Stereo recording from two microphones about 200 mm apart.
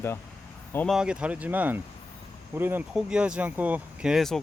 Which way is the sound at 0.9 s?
5° right (ahead or behind).